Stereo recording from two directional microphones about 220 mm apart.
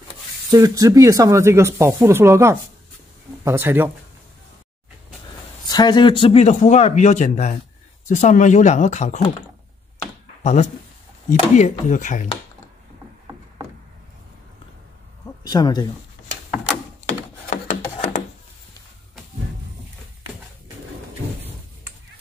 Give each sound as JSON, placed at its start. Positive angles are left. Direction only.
{"t": 0.5, "sound": "speech", "side_deg": -15}
{"t": 5.7, "sound": "speech", "side_deg": 20}
{"t": 10.4, "sound": "speech", "side_deg": 30}
{"t": 15.4, "sound": "speech", "side_deg": 15}
{"t": 17.5, "sound": "rub", "side_deg": 30}